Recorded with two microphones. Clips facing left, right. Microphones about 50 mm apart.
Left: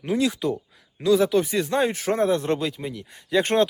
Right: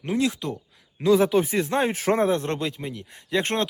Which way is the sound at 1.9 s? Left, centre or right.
Right.